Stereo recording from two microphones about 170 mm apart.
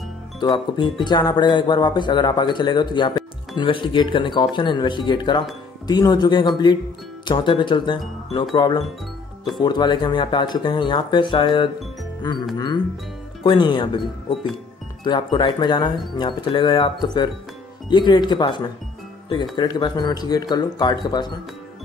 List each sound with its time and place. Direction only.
0.4 s speech: 30° left (ahead or behind)
13.4 s speech: 30° left (ahead or behind)